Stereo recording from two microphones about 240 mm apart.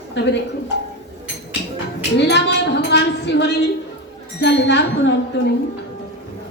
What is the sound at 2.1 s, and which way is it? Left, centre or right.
A woman's voice, left.